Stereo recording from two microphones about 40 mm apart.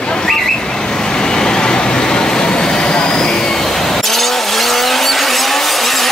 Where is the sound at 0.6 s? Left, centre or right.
Centre.